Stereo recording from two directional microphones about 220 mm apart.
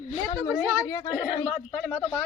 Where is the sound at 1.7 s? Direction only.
5° left (ahead or behind).